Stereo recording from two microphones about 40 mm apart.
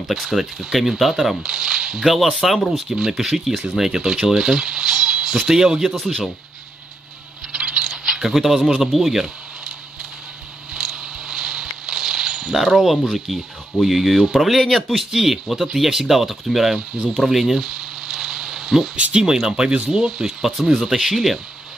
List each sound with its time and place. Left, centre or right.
0.1 s speech: centre
1.4 s speech: centre
2.1 s speech: centre
7.5 s rattle: centre
8.7 s speech: centre
10.7 s a sound: centre
13.1 s speech: centre
17.2 s a sound: centre
19.1 s speech: centre